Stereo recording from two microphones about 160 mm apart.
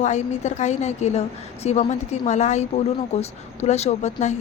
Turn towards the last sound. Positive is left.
turn(degrees=45)  # may be behind; listen again after turning